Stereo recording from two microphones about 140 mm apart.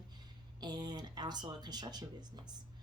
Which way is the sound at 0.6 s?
30° right (ahead or behind).